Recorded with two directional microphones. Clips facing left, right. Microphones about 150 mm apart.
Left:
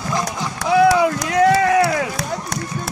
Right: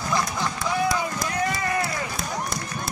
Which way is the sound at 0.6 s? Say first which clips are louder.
Left 12 dB; 75° left (ahead or behind).